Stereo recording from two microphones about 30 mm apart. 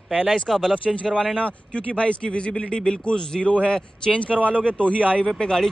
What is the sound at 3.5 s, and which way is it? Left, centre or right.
Speech, left.